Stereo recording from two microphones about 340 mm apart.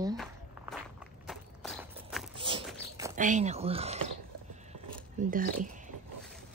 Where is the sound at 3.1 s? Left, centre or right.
Right.